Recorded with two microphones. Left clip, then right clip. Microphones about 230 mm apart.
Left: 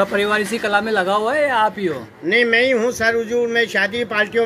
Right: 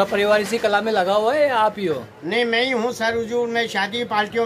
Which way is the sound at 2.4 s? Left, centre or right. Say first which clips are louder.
Left 4 dB; right.